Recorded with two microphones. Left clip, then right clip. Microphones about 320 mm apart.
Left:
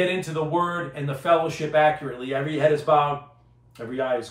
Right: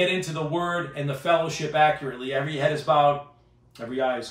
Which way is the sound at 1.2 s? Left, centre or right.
Centre.